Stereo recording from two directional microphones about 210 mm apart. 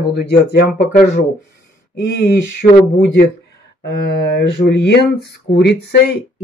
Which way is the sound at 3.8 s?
50° left (ahead or behind).